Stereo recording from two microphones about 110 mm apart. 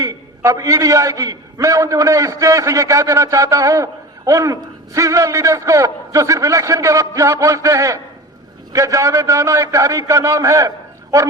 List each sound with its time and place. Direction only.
0.0 s a man's voice: 30° right (ahead or behind)